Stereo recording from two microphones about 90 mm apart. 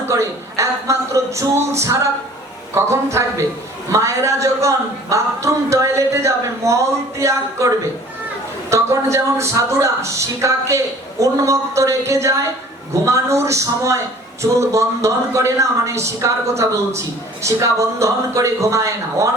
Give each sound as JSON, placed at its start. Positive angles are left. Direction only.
{"t": 0.0, "sound": "a man's voice", "side_deg": -35}
{"t": 8.7, "sound": "a man's voice", "side_deg": -35}